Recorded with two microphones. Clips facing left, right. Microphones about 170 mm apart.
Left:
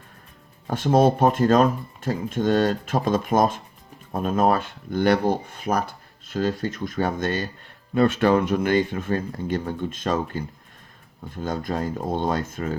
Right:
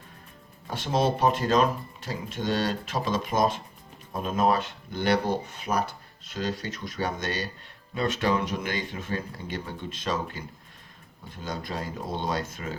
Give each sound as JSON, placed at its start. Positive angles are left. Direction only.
{"t": 0.7, "sound": "speech", "side_deg": 50}
{"t": 11.4, "sound": "speech", "side_deg": 50}